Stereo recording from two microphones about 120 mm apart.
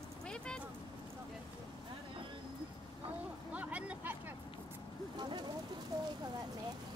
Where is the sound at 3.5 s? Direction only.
10° right (ahead or behind).